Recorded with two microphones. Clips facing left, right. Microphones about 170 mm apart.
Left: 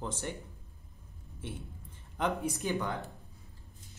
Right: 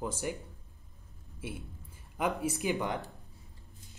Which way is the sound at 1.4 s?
10° right (ahead or behind).